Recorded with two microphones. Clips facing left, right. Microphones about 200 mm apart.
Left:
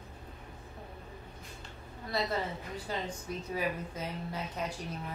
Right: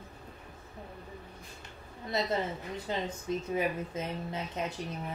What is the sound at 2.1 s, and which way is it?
Speech, 20° right (ahead or behind).